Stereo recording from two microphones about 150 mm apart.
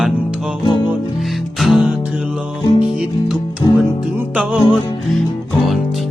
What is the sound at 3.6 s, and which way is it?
Music, 30° left (ahead or behind).